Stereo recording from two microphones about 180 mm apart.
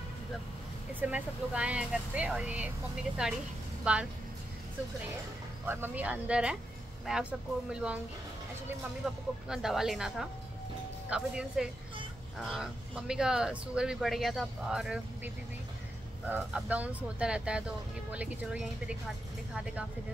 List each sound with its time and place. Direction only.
1.0 s speech: 5° right (ahead or behind)
5.7 s speech: 10° right (ahead or behind)